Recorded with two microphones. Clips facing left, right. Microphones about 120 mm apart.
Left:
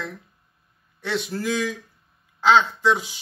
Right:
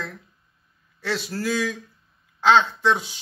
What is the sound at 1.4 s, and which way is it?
A man's voice, 15° left (ahead or behind).